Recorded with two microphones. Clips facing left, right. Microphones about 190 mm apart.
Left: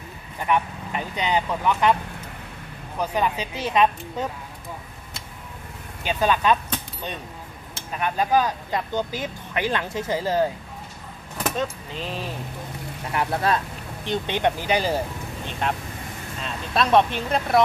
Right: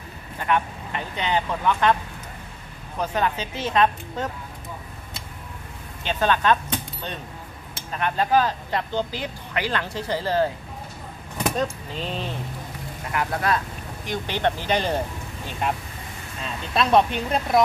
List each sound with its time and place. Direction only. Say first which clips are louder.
0.5 s speech: left 1 dB; 10° left (ahead or behind)
3.0 s speech: even; 10° left (ahead or behind)
6.0 s speech: even; 10° left (ahead or behind)
7.9 s speech: even; 10° left (ahead or behind)
11.3 s speech: right 2 dB; centre (ahead or behind)
13.1 s speech: left 1 dB; 25° left (ahead or behind); by 15.0 s 10° left (ahead or behind)
15.6 s speech: even; 5° right (ahead or behind)